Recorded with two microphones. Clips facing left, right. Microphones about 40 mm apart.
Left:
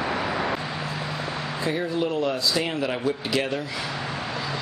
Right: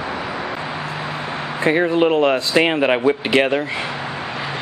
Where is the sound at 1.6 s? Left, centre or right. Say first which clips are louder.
Right 11 dB; right.